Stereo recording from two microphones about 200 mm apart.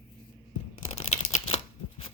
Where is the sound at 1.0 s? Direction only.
30° left (ahead or behind).